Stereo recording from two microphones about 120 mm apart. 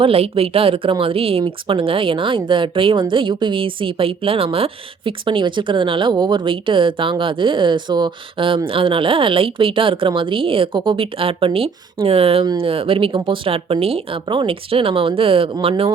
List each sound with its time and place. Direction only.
0.0 s a woman's voice: 55° right (ahead or behind)